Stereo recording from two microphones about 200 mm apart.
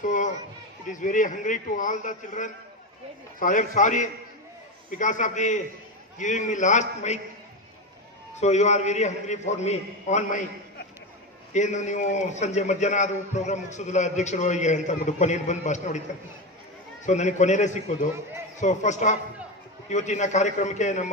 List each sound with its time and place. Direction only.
0.0 s chatter: 40° left (ahead or behind)
0.9 s a man's voice: 40° left (ahead or behind)
8.4 s a man's voice: 35° left (ahead or behind)
11.5 s a man's voice: 35° left (ahead or behind)
17.0 s a man's voice: 35° left (ahead or behind)